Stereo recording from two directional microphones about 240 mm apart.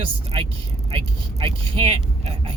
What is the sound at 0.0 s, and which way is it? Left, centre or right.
Speech, right.